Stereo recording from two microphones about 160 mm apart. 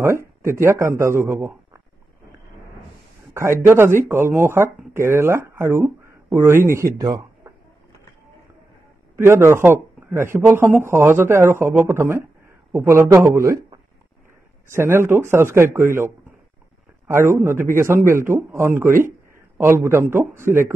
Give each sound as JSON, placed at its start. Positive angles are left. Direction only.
{"t": 0.0, "sound": "speech", "side_deg": -15}
{"t": 3.3, "sound": "speech", "side_deg": -15}
{"t": 7.0, "sound": "a sound", "side_deg": -20}
{"t": 9.1, "sound": "speech", "side_deg": -15}
{"t": 17.1, "sound": "speech", "side_deg": -15}